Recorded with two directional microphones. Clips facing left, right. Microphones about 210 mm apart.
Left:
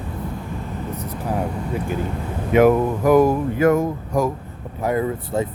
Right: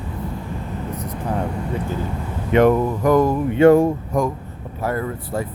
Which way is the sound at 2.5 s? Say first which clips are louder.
Even; 5° left (ahead or behind).